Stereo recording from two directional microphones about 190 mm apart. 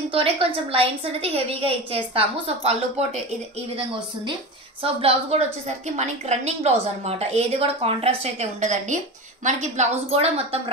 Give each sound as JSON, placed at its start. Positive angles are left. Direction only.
{"t": 0.1, "sound": "a woman's voice", "side_deg": -30}